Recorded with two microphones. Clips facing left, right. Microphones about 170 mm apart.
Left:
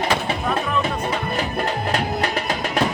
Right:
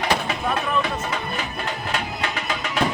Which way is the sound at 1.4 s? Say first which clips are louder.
Left 6 dB; 40° left (ahead or behind).